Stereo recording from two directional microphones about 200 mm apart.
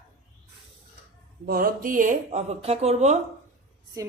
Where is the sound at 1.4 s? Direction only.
45° right (ahead or behind).